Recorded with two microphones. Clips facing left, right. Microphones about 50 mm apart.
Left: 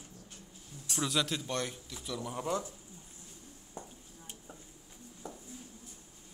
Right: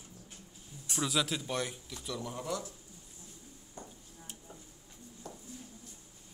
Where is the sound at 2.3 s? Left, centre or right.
Left.